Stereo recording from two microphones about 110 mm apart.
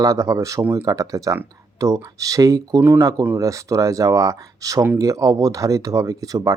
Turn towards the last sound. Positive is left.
turn(degrees=-30)  # may be behind; listen again after turning